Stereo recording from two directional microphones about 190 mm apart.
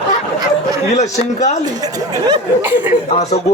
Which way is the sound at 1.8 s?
20° right (ahead or behind).